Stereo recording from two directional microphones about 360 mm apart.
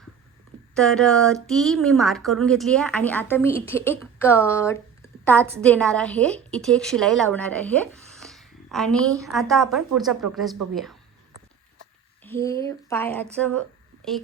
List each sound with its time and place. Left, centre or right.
0.7 s a woman's voice: centre
12.2 s speech: centre